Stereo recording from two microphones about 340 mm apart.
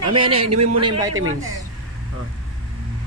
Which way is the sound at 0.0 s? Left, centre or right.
Centre.